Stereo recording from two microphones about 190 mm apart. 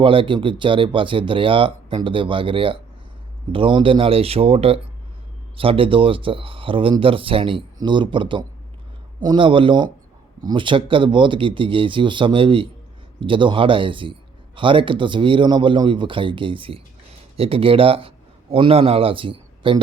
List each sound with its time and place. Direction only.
0.0 s a man's voice: 25° right (ahead or behind)